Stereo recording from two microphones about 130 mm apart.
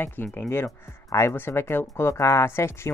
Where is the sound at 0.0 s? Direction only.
15° left (ahead or behind).